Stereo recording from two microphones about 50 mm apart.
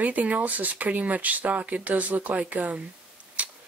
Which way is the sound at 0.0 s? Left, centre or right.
Right.